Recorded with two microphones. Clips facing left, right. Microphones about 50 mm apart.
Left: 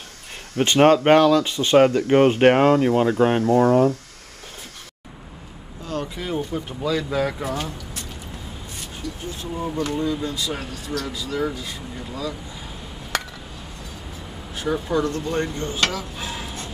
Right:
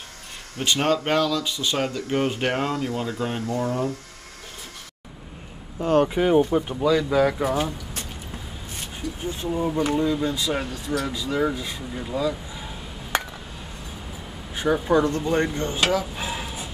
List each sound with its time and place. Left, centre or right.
0.6 s speech: left
5.8 s speech: right
6.7 s speech: centre
9.0 s speech: centre
11.1 s speech: right
13.1 s chop: right
14.5 s speech: centre
15.9 s a sound: centre